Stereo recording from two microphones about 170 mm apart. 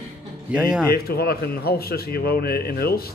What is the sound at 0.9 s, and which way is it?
A man's voice, 65° left (ahead or behind).